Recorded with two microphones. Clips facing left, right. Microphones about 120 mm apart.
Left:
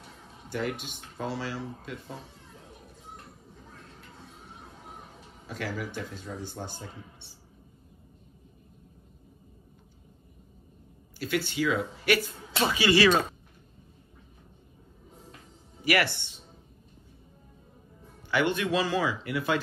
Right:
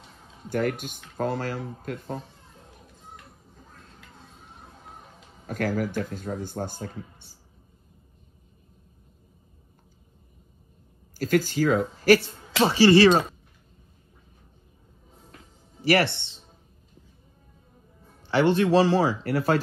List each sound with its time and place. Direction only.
0.5 s a man's voice: 50° right (ahead or behind)
5.5 s a man's voice: 45° right (ahead or behind)
11.1 s speech: 40° right (ahead or behind)
15.8 s speech: 30° right (ahead or behind)
18.3 s speech: 30° right (ahead or behind)